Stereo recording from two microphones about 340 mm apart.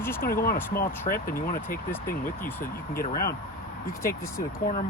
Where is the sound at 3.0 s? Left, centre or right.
Left.